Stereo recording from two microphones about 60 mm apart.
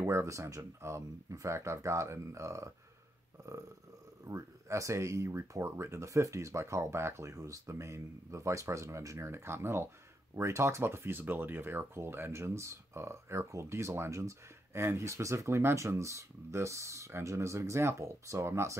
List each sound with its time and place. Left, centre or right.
0.0 s speech: right
4.3 s speech: right
7.3 s speech: right